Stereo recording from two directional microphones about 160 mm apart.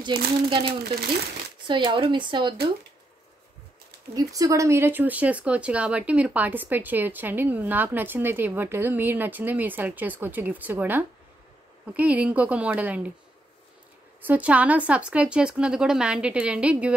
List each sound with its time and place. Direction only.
0.5 s speech: 30° right (ahead or behind)
4.1 s speech: 20° right (ahead or behind)
14.2 s speech: 10° right (ahead or behind)